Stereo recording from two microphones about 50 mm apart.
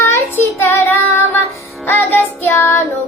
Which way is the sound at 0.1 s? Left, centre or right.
Left.